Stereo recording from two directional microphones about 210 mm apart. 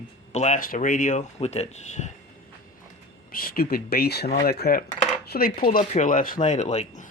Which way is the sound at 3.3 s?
45° left (ahead or behind).